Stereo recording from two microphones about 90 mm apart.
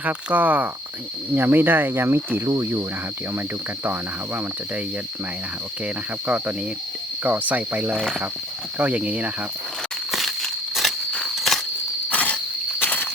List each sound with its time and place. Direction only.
0.0 s speech: 15° right (ahead or behind)
5.8 s speech: 15° right (ahead or behind)
10.1 s a sound: centre (ahead or behind)
11.3 s insect: centre (ahead or behind)
12.1 s insect: 15° left (ahead or behind)
12.8 s walk: 20° left (ahead or behind)